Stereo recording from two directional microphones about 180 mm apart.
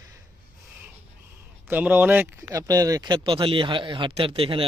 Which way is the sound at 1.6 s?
10° right (ahead or behind).